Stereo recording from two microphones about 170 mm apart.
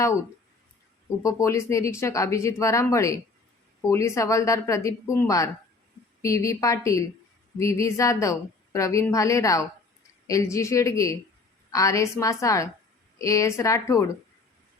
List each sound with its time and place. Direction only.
1.2 s a woman's voice: 20° left (ahead or behind)